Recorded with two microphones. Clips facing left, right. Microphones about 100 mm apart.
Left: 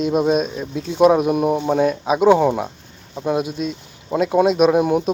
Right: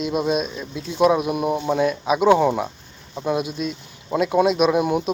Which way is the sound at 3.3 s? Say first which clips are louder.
Left 2 dB; 35° left (ahead or behind).